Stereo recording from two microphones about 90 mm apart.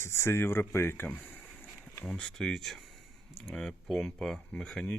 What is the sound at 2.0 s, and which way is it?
Speech, 10° left (ahead or behind).